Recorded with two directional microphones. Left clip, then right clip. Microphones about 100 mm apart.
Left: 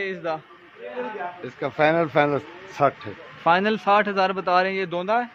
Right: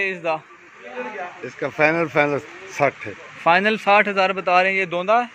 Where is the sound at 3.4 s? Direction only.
Centre (ahead or behind).